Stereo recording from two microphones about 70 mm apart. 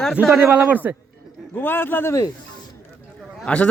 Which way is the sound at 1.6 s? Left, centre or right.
Left.